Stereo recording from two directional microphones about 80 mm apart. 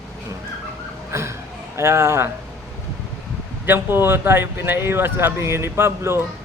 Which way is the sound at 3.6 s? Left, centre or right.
Right.